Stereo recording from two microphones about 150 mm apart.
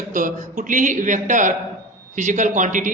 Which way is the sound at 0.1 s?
60° right (ahead or behind).